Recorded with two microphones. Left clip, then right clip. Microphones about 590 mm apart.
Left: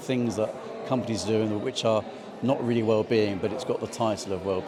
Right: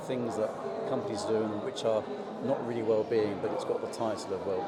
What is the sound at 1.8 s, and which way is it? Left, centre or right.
A man's voice, left.